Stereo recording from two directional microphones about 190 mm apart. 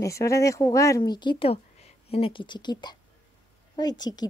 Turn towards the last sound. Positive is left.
turn(degrees=20)  # may be behind; listen again after turning